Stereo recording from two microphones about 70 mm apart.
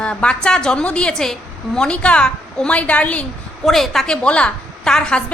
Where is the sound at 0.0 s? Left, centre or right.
Centre.